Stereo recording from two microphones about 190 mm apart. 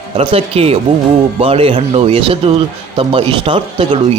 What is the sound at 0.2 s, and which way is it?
Speech, 30° right (ahead or behind).